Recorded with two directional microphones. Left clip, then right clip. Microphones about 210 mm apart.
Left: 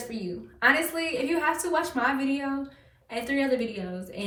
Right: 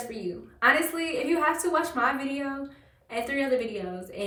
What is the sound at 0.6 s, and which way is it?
A woman's voice, centre (ahead or behind).